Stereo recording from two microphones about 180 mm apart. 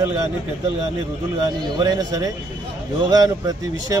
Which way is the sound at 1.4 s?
20° right (ahead or behind).